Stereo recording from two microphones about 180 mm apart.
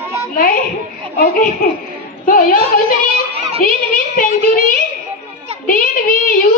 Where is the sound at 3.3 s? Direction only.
35° right (ahead or behind).